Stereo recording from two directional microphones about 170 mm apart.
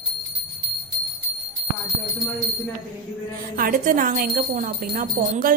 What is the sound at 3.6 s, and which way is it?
Speech, 55° right (ahead or behind).